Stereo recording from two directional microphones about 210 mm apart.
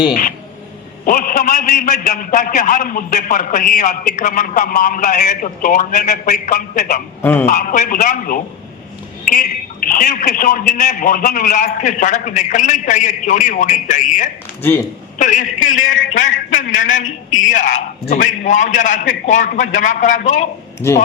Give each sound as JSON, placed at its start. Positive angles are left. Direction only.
{"t": 0.1, "sound": "a man's voice", "side_deg": 40}
{"t": 7.2, "sound": "speech", "side_deg": 10}
{"t": 7.4, "sound": "a man's voice", "side_deg": 40}
{"t": 20.8, "sound": "a man's voice", "side_deg": 10}